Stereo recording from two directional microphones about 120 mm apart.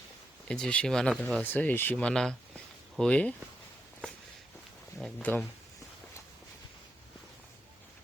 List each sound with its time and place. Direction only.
0.4 s speech: 5° left (ahead or behind)
5.3 s speech: 15° left (ahead or behind)